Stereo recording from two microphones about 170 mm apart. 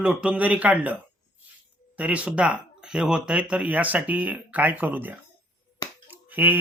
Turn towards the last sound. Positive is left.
turn(degrees=-10)  # may be behind; listen again after turning